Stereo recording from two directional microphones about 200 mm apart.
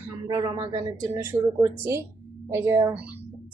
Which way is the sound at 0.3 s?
20° right (ahead or behind).